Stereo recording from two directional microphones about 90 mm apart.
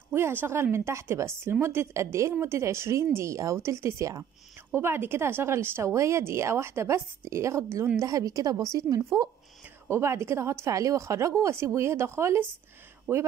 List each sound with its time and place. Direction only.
0.1 s a woman's voice: 25° right (ahead or behind); by 9.3 s 45° right (ahead or behind)
9.8 s speech: 30° right (ahead or behind)